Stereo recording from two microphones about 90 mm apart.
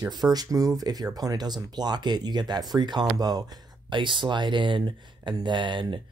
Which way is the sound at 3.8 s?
60° right (ahead or behind).